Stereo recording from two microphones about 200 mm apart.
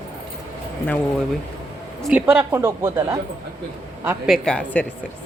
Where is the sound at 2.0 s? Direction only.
10° right (ahead or behind).